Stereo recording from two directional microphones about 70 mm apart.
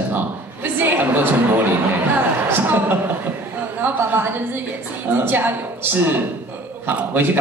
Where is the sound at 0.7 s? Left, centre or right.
Right.